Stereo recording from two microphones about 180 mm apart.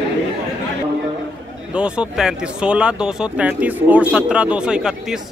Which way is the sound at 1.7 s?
5° right (ahead or behind).